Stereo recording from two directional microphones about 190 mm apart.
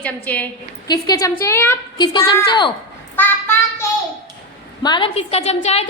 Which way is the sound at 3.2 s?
10° left (ahead or behind).